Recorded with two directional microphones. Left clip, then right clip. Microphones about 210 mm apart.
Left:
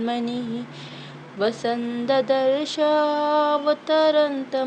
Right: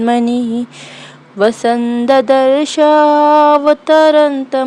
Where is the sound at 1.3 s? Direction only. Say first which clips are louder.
Right 11 dB; 45° right (ahead or behind).